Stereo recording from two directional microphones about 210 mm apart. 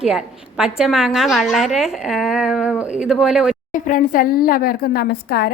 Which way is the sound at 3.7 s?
40° left (ahead or behind).